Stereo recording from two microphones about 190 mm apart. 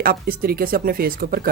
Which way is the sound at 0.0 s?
50° right (ahead or behind).